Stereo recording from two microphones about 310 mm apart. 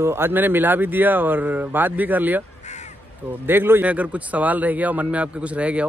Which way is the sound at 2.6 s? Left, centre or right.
Left.